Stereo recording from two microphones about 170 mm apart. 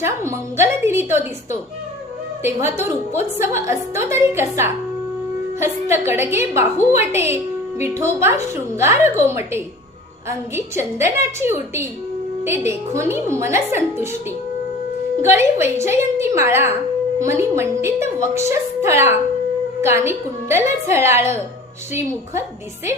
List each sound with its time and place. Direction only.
0.0 s a woman's voice: 15° right (ahead or behind)
15.2 s a woman's voice: 15° right (ahead or behind)